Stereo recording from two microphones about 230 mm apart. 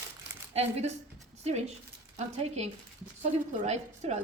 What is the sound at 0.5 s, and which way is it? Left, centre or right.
A woman's voice, right.